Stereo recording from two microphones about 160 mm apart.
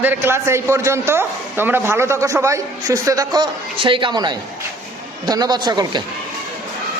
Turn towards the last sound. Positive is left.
turn(degrees=-25)  # may be behind; listen again after turning